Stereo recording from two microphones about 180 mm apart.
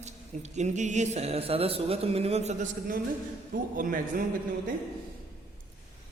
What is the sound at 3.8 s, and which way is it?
Speech, 50° right (ahead or behind).